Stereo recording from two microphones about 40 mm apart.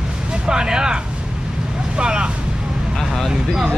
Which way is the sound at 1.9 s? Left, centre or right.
Right.